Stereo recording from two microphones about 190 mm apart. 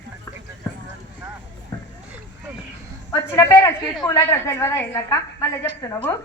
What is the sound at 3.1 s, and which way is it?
A woman's voice, 15° left (ahead or behind).